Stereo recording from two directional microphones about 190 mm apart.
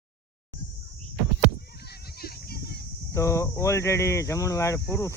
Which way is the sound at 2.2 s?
55° left (ahead or behind).